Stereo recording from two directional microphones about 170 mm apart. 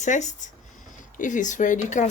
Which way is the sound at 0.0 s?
45° left (ahead or behind).